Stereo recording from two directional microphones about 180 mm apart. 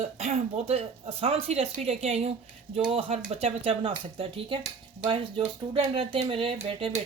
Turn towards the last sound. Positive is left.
turn(degrees=-35)  # may be behind; listen again after turning